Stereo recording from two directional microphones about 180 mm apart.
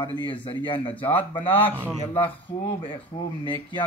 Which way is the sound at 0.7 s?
30° left (ahead or behind).